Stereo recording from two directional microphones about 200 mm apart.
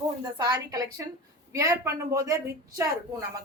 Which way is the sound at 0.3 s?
20° right (ahead or behind).